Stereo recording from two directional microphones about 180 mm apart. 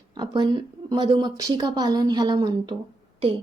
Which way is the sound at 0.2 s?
25° right (ahead or behind).